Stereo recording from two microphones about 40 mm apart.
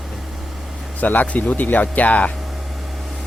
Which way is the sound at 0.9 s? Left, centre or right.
Left.